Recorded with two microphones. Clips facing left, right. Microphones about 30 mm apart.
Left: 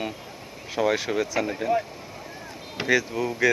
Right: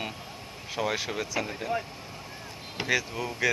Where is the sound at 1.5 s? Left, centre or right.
Left.